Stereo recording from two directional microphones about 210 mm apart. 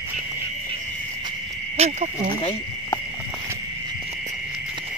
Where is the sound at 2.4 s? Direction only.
20° left (ahead or behind).